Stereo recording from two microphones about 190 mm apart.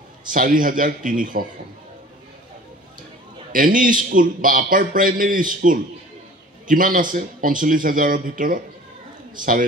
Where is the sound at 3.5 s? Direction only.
45° right (ahead or behind).